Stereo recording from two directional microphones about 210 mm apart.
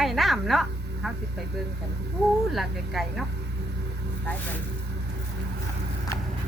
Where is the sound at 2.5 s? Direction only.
Centre (ahead or behind).